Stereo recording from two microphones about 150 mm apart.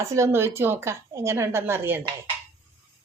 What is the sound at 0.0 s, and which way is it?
Speech, 20° right (ahead or behind).